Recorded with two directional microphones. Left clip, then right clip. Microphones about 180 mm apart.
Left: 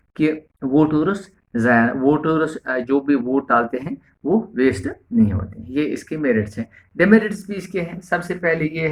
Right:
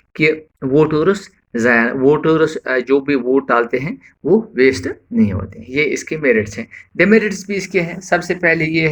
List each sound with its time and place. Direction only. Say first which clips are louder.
0.2 s speech: right 5 dB; 15° right (ahead or behind); by 8.9 s 30° right (ahead or behind)